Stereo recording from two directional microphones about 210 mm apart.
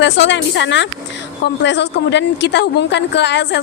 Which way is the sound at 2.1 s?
55° left (ahead or behind).